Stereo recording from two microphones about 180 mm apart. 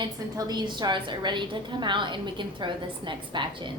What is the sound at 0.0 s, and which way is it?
A woman's voice, 20° right (ahead or behind).